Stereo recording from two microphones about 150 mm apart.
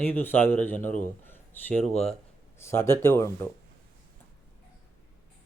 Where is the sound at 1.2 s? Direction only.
15° left (ahead or behind).